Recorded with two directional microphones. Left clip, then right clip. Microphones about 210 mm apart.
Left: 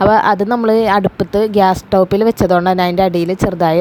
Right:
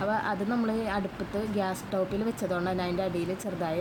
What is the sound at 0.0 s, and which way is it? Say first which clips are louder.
Speech: left 18 dB; 45° left (ahead or behind).